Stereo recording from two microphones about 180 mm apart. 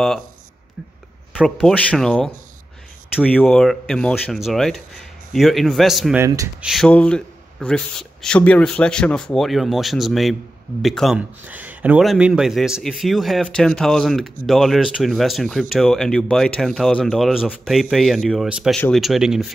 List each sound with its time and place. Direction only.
1.3 s a man's voice: 5° right (ahead or behind)
6.1 s speech: 15° right (ahead or behind)
6.6 s a man's voice: centre (ahead or behind)